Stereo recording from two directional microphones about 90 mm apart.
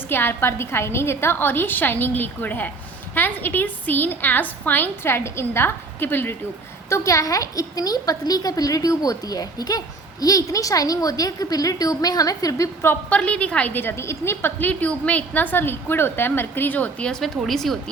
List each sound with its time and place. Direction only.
0.1 s a woman's voice: 25° left (ahead or behind)
6.9 s a woman's voice: 35° left (ahead or behind)
12.9 s a woman's voice: 15° left (ahead or behind)
17.1 s speech: 5° left (ahead or behind)